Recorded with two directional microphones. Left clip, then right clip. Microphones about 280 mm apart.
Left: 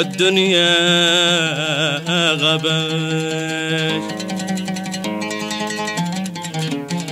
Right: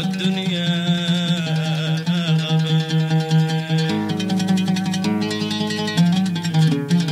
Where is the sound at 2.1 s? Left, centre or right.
Left.